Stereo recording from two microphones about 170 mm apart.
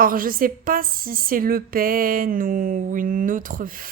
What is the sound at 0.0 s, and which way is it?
A woman's voice, 55° right (ahead or behind).